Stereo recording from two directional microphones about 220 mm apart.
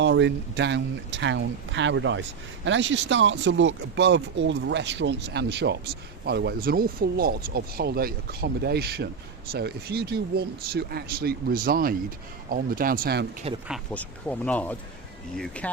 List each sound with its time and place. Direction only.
0.0 s speech: 55° right (ahead or behind)
13.7 s speech: centre (ahead or behind)